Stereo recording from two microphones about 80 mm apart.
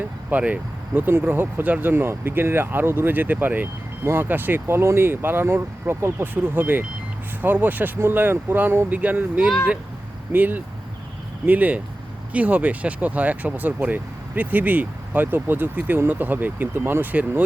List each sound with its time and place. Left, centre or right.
0.3 s speech: centre